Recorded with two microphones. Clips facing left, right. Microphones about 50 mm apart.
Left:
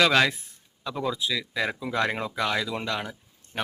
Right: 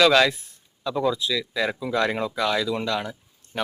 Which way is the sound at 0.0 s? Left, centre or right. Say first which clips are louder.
Right 3 dB; centre.